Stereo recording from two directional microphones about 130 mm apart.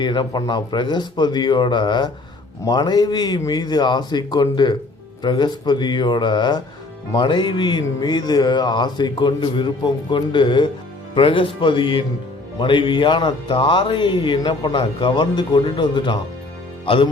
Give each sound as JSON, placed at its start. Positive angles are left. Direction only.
{"t": 0.0, "sound": "speech", "side_deg": 35}